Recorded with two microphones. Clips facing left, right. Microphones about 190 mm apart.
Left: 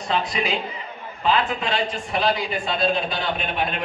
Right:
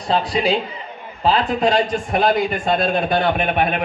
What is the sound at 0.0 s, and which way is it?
A man's voice, 35° right (ahead or behind).